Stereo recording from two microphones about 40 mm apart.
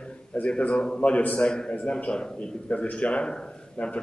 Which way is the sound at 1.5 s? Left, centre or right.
Left.